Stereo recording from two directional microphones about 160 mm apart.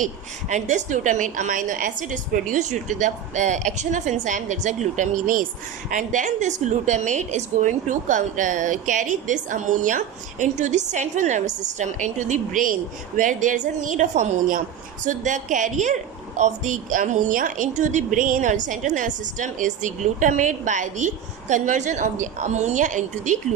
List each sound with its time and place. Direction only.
0.0 s a woman's voice: 50° right (ahead or behind)